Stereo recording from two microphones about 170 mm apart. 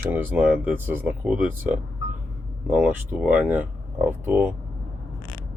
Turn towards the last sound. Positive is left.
turn(degrees=-10)  # may be behind; listen again after turning